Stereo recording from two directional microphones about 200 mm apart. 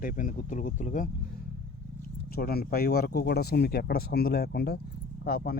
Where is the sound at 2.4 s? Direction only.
50° left (ahead or behind).